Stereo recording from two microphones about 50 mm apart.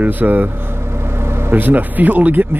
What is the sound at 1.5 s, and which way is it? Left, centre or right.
Speech, right.